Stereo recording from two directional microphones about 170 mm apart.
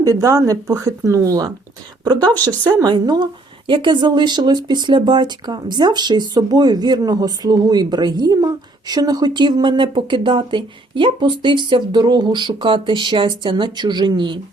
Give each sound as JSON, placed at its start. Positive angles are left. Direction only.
{"t": 0.0, "sound": "speech", "side_deg": -20}
{"t": 2.6, "sound": "speech", "side_deg": -20}